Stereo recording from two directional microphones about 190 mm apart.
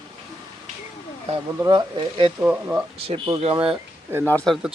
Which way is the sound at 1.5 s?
20° right (ahead or behind).